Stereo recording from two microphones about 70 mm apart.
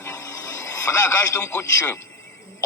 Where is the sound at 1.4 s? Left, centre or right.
Left.